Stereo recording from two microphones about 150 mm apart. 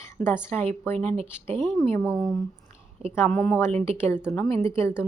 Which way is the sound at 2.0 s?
Centre (ahead or behind).